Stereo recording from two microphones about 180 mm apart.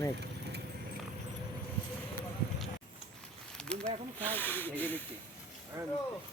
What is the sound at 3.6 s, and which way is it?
Snake, 5° left (ahead or behind).